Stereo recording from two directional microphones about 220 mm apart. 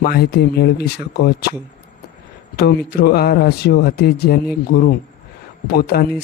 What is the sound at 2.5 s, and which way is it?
Speech, 45° left (ahead or behind).